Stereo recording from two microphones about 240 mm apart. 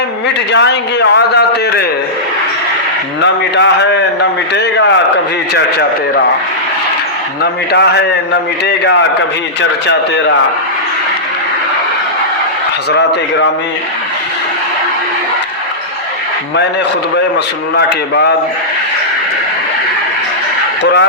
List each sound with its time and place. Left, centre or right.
0.5 s a man's voice: left
3.2 s a man's voice: left
7.7 s a man's voice: left
17.7 s a man's voice: left